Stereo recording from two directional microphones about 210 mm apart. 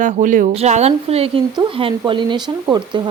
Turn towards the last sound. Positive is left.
turn(degrees=-20)  # may be behind; listen again after turning